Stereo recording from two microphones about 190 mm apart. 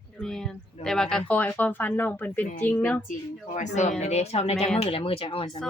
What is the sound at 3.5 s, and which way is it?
A man's voice, 40° left (ahead or behind).